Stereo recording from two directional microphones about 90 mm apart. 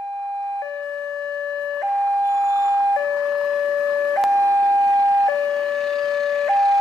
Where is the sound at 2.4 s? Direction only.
35° right (ahead or behind).